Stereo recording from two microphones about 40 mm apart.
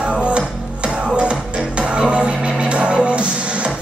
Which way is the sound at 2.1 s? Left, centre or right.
Centre.